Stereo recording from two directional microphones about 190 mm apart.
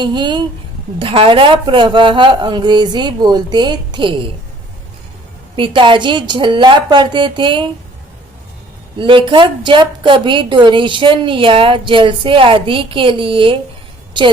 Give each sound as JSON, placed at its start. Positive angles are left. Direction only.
{"t": 0.0, "sound": "a woman's voice", "side_deg": -25}
{"t": 5.5, "sound": "a woman's voice", "side_deg": -25}
{"t": 9.0, "sound": "a woman's voice", "side_deg": -25}